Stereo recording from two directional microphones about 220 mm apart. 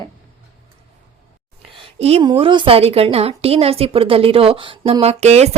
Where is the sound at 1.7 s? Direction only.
25° right (ahead or behind).